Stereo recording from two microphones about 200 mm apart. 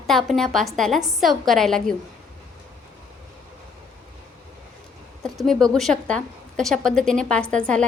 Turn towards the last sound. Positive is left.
turn(degrees=5)  # may be behind; listen again after turning